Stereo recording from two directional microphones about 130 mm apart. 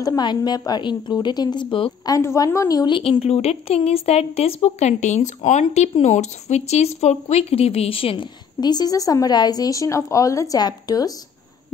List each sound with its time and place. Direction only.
0.0 s a woman's voice: 30° left (ahead or behind)
2.0 s a woman's voice: 25° left (ahead or behind)
3.0 s speech: 50° left (ahead or behind); by 11.1 s 30° left (ahead or behind)